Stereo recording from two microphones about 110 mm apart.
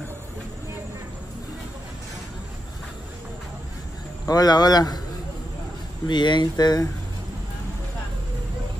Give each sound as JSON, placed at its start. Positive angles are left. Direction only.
{"t": 4.3, "sound": "speech", "side_deg": 35}
{"t": 6.0, "sound": "speech", "side_deg": 45}